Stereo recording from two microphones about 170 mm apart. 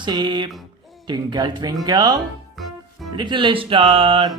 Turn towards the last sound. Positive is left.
turn(degrees=-30)  # may be behind; listen again after turning